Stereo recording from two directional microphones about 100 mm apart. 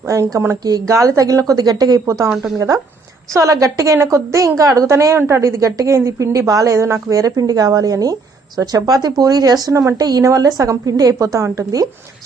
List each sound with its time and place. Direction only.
0.1 s a woman's voice: 30° right (ahead or behind)
2.0 s a woman's voice: 30° right (ahead or behind)